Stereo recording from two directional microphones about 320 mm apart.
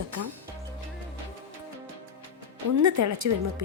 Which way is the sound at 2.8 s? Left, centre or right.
Right.